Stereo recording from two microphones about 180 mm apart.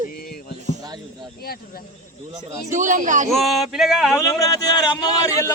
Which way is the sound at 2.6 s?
45° right (ahead or behind).